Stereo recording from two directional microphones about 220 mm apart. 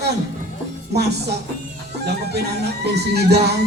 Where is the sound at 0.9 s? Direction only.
50° right (ahead or behind).